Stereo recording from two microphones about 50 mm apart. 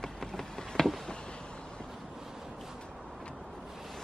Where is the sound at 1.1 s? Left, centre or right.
Centre.